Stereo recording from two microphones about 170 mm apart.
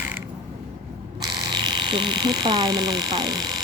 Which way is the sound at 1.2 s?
25° right (ahead or behind).